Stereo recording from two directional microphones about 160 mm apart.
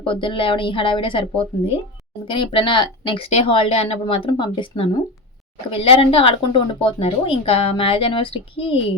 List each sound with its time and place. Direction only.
0.0 s a woman's voice: 30° left (ahead or behind)